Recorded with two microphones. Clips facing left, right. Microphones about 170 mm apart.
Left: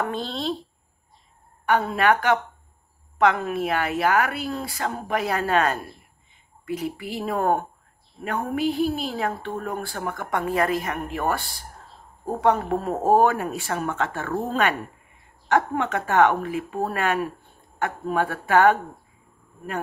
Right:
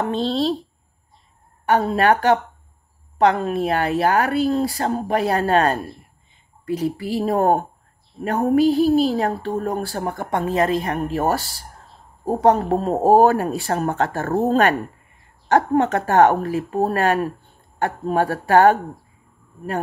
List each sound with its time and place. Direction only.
0.0 s a woman's voice: 30° right (ahead or behind)
1.7 s a woman's voice: 35° right (ahead or behind)